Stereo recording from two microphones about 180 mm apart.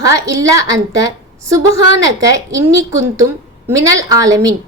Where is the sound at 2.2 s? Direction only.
20° right (ahead or behind).